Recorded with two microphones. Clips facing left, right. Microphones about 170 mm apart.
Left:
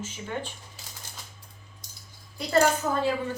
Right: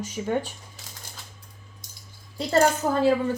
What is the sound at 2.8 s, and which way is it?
Speech, 40° right (ahead or behind).